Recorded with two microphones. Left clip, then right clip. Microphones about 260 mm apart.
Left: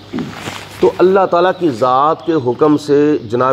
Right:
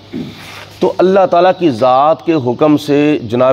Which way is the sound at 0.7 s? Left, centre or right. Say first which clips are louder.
Right 1 dB; right.